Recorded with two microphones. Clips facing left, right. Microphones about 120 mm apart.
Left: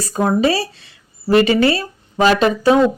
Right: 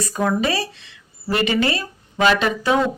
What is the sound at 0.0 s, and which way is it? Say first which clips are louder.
Speech: left 4 dB; 30° left (ahead or behind).